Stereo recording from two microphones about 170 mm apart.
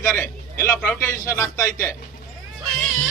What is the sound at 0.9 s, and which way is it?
Speech, 15° left (ahead or behind).